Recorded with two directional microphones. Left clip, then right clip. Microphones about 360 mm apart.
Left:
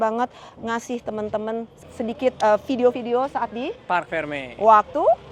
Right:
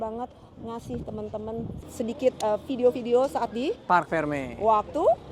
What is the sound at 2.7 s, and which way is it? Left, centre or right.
Speech, left.